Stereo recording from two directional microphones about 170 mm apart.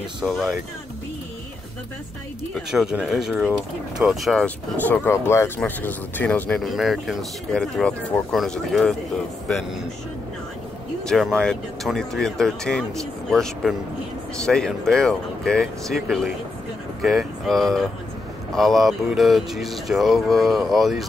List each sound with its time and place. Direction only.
0.2 s speech: 5° right (ahead or behind)
2.5 s speech: 5° right (ahead or behind)
11.1 s speech: centre (ahead or behind)